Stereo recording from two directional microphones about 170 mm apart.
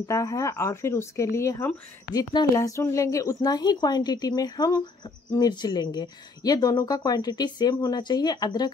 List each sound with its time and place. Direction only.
0.0 s speech: 20° left (ahead or behind)